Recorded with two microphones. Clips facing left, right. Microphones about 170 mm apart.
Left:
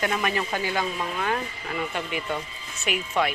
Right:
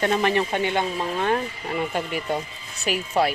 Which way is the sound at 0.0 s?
30° right (ahead or behind).